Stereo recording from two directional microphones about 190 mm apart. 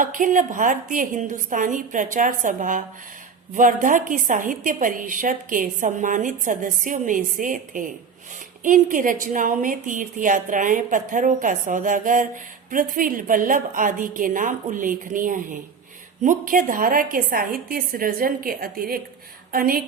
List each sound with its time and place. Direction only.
0.0 s a woman's voice: 45° right (ahead or behind)